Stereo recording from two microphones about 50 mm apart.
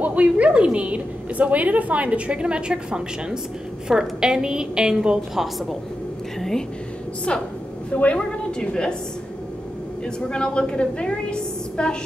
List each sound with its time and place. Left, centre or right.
0.0 s a woman's voice: right
5.3 s a woman's voice: centre
7.3 s a woman's voice: left
10.3 s a woman's voice: centre